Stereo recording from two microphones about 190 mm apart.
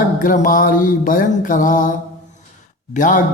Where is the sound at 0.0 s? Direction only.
45° left (ahead or behind).